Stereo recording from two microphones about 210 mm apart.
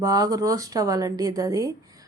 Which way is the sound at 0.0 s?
15° right (ahead or behind).